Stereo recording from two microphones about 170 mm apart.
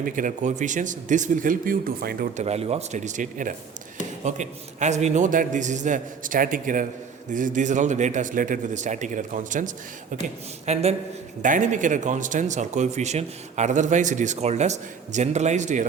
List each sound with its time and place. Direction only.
0.0 s speech: 50° right (ahead or behind)
2.3 s speech: 40° right (ahead or behind)
10.7 s speech: 40° right (ahead or behind)
11.4 s speech: 50° right (ahead or behind)